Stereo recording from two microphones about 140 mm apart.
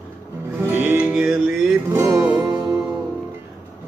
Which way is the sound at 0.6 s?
15° right (ahead or behind).